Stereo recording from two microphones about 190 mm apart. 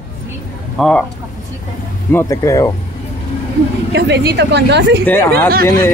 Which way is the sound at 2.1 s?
15° left (ahead or behind).